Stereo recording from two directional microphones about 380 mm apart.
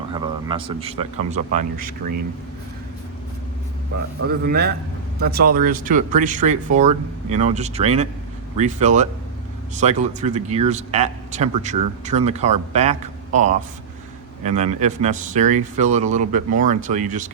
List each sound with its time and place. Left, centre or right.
0.1 s speech: centre
4.3 s speech: right